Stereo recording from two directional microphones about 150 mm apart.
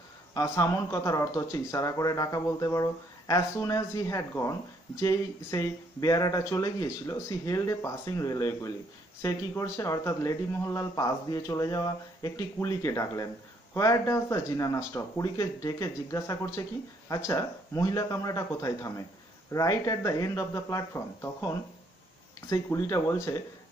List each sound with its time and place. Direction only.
0.3 s speech: 20° left (ahead or behind)